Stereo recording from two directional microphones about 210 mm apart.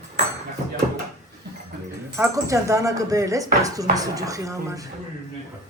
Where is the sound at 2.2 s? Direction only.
15° right (ahead or behind).